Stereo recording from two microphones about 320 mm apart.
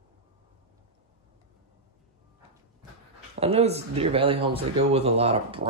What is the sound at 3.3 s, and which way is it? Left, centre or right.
Speech, centre.